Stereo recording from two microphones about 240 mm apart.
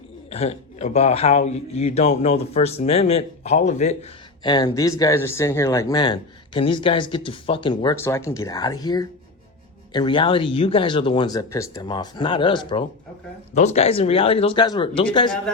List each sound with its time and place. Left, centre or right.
0.3 s a man's voice: left